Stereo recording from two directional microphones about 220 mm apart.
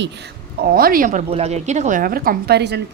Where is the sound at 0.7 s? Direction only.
40° right (ahead or behind).